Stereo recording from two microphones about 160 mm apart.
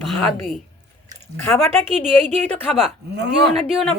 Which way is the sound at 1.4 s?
15° left (ahead or behind).